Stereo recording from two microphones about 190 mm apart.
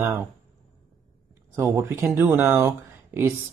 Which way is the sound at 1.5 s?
10° right (ahead or behind).